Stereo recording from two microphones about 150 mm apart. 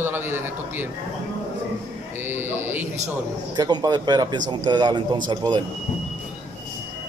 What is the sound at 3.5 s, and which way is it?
A man's voice, 25° right (ahead or behind).